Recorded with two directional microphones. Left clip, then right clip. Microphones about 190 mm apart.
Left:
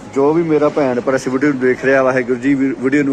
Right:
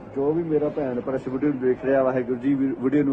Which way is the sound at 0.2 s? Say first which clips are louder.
Left 10 dB; 35° left (ahead or behind).